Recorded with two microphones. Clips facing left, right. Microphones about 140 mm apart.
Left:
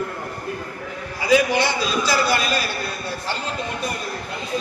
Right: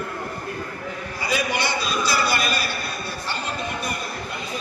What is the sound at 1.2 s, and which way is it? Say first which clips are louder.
Speech: left 8 dB; 90° left.